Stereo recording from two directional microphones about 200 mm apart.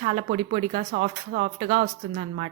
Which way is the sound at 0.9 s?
45° right (ahead or behind).